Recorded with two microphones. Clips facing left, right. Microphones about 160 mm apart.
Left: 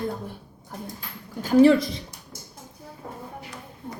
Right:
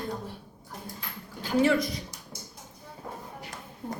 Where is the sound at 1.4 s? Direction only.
35° left (ahead or behind).